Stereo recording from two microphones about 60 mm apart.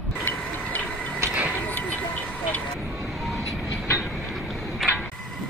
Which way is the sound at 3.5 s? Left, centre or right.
Centre.